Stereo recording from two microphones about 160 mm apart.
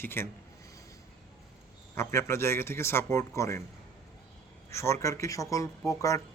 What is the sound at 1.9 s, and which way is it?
Speech, 20° left (ahead or behind).